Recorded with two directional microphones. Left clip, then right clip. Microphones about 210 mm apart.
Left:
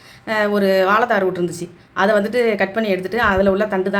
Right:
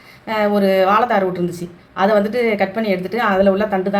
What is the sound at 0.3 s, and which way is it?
Speech, 25° left (ahead or behind).